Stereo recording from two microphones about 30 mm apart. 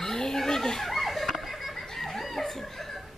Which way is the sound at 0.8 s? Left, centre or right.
Centre.